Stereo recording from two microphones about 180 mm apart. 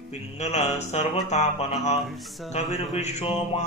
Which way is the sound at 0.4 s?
40° left (ahead or behind).